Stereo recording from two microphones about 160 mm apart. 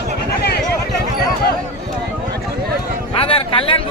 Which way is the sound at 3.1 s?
35° left (ahead or behind).